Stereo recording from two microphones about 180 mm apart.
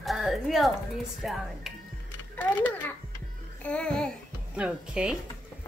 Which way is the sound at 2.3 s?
10° left (ahead or behind).